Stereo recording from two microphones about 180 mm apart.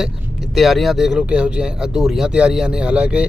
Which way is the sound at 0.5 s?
Centre (ahead or behind).